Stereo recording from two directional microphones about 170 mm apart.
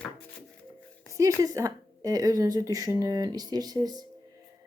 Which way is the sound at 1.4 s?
20° right (ahead or behind).